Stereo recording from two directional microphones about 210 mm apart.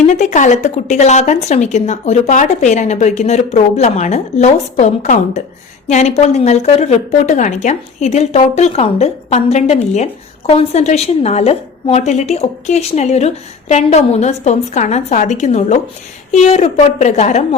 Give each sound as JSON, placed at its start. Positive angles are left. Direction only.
{"t": 0.0, "sound": "a woman's voice", "side_deg": 35}